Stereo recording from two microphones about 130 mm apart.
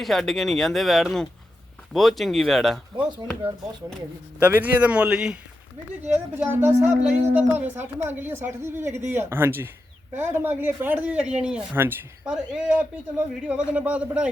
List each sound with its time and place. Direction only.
0.0 s speech: centre (ahead or behind)
4.4 s speech: 10° right (ahead or behind)
6.9 s speech: 65° right (ahead or behind)
7.5 s speech: 15° right (ahead or behind)